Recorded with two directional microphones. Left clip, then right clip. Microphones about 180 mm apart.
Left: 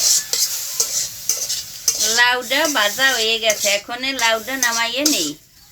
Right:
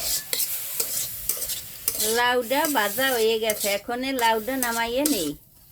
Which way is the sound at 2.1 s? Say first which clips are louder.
Left 5 dB; 70° right (ahead or behind).